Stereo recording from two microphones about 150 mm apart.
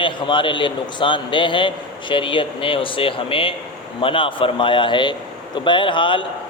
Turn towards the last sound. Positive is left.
turn(degrees=35)  # may be behind; listen again after turning